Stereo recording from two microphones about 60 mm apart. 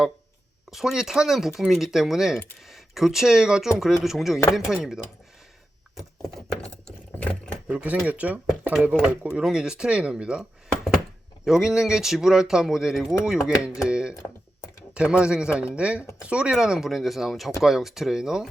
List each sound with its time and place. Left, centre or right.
0.7 s speech: centre
7.2 s sewing machine: left
7.7 s speech: right
8.9 s speech: centre
11.4 s speech: centre